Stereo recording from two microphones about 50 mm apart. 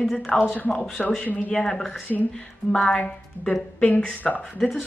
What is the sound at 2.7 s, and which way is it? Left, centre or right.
Speech, left.